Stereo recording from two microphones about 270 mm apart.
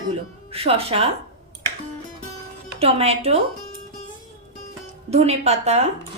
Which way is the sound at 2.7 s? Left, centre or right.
Right.